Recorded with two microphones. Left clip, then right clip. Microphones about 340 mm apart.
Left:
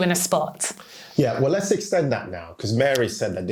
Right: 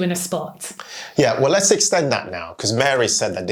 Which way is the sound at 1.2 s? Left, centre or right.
Right.